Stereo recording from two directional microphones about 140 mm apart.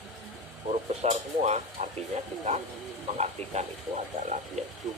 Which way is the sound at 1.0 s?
50° right (ahead or behind).